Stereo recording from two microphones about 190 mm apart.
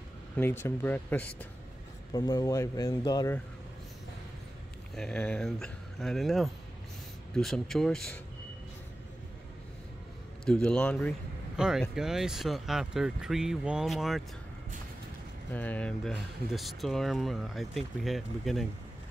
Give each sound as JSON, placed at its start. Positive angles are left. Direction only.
{"t": 0.4, "sound": "speech", "side_deg": 10}
{"t": 2.1, "sound": "speech", "side_deg": 20}
{"t": 4.9, "sound": "speech", "side_deg": 5}
{"t": 10.4, "sound": "speech", "side_deg": 5}
{"t": 15.5, "sound": "speech", "side_deg": 10}